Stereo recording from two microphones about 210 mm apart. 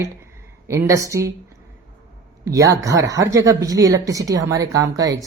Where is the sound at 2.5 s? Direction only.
15° right (ahead or behind).